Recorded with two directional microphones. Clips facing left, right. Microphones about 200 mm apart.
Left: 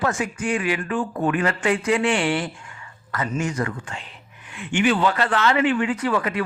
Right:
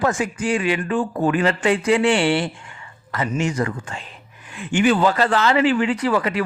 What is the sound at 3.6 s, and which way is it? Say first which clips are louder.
A man's voice: right 3 dB; 35° right (ahead or behind).